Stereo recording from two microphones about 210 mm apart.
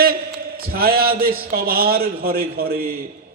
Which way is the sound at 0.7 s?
45° right (ahead or behind).